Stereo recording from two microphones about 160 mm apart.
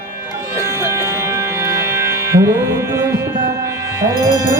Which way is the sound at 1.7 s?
15° right (ahead or behind).